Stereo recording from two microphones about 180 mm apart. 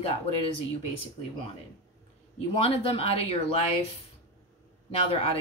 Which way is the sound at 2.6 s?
30° left (ahead or behind).